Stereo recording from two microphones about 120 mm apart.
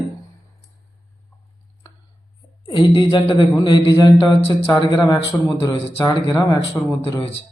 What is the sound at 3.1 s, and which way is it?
Speech, 40° left (ahead or behind).